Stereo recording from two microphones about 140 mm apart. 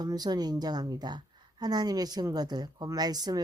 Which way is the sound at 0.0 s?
30° right (ahead or behind).